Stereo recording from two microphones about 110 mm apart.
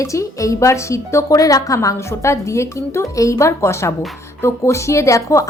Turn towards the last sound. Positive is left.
turn(degrees=30)  # may be behind; listen again after turning